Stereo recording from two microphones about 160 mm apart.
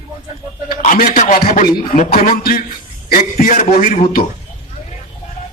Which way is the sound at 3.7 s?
45° left (ahead or behind).